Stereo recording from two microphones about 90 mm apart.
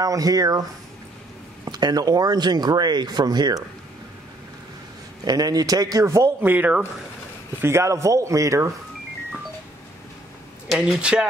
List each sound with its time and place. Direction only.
0.0 s speech: 40° right (ahead or behind)
1.7 s speech: 50° right (ahead or behind)
5.2 s speech: 45° right (ahead or behind)
6.4 s speech: 20° right (ahead or behind)
7.6 s a man's voice: 30° right (ahead or behind)
10.7 s speech: 5° right (ahead or behind)